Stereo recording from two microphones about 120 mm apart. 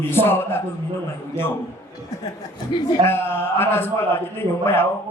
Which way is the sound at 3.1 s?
20° left (ahead or behind).